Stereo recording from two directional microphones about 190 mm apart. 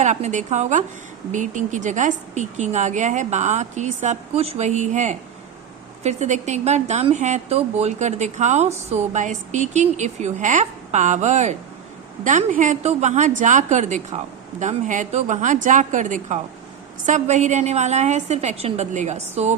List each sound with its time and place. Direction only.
0.0 s speech: 40° right (ahead or behind)